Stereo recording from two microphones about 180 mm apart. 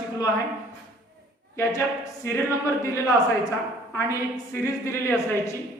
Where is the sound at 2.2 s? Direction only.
15° left (ahead or behind).